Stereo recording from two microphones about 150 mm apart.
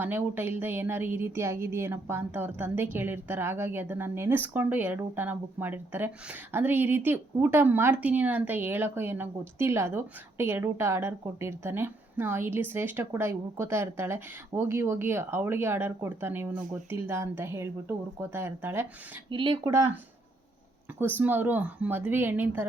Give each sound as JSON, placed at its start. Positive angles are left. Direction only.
{"t": 0.0, "sound": "a woman's voice", "side_deg": -15}
{"t": 19.3, "sound": "speech", "side_deg": -35}
{"t": 19.6, "sound": "speech", "side_deg": -20}
{"t": 21.0, "sound": "a woman's voice", "side_deg": -15}